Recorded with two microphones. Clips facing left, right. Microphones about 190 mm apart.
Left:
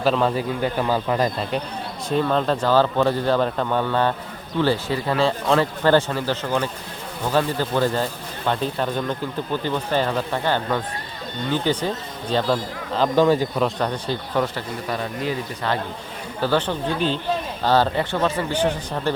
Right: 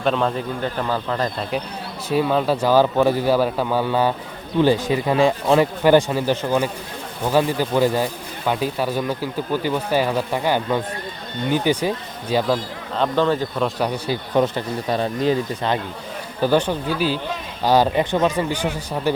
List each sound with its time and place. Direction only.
0.0 s a man's voice: centre (ahead or behind)
1.4 s speech: centre (ahead or behind)
13.1 s a man's voice: 10° left (ahead or behind)
13.6 s speech: 5° right (ahead or behind)
14.3 s speech: 20° right (ahead or behind)
16.4 s speech: 15° right (ahead or behind)